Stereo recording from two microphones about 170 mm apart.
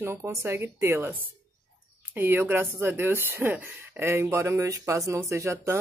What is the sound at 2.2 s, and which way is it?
Speech, 15° right (ahead or behind).